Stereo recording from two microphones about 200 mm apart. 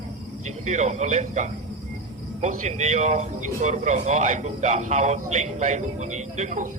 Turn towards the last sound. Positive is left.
turn(degrees=-35)  # may be behind; listen again after turning